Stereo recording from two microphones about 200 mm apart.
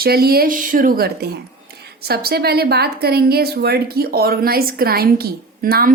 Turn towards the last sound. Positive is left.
turn(degrees=-50)  # may be behind; listen again after turning